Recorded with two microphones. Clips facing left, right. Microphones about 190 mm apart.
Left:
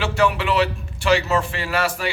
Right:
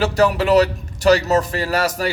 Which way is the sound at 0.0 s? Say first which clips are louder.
Right 4 dB; 40° right (ahead or behind).